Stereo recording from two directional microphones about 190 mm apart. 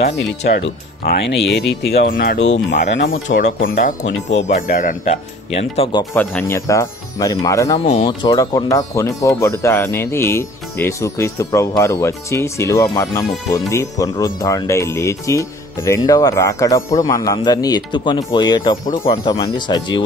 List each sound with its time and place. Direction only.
0.3 s speech: 70° left (ahead or behind)
1.0 s speech: 60° left (ahead or behind)
2.3 s speech: 75° left (ahead or behind)
3.3 s speech: 50° left (ahead or behind); by 6.0 s 30° left (ahead or behind)
6.1 s speech: 10° left (ahead or behind)
7.8 s speech: 30° left (ahead or behind)